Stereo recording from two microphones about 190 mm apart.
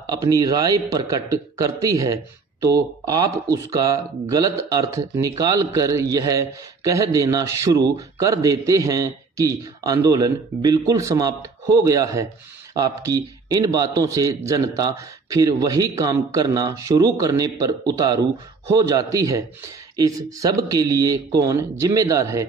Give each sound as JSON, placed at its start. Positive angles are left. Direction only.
{"t": 0.0, "sound": "speech", "side_deg": -20}